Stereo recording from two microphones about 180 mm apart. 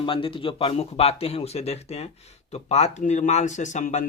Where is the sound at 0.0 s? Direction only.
30° left (ahead or behind).